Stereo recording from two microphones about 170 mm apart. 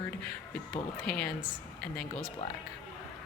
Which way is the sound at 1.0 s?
5° left (ahead or behind).